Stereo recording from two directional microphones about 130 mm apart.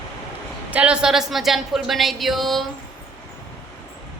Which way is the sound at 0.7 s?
10° right (ahead or behind).